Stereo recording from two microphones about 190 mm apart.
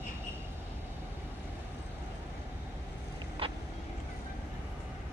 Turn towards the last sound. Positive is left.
turn(degrees=-30)  # may be behind; listen again after turning